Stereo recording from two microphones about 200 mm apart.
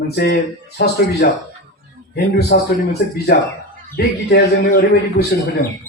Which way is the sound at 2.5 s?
55° left (ahead or behind).